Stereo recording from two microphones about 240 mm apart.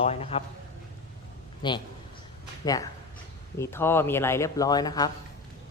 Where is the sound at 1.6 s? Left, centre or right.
Centre.